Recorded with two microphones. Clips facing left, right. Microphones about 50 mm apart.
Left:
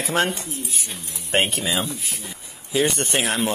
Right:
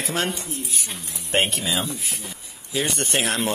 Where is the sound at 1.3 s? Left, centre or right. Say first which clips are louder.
Left 1 dB; centre.